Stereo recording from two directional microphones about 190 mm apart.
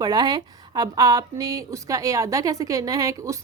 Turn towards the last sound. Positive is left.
turn(degrees=-15)  # may be behind; listen again after turning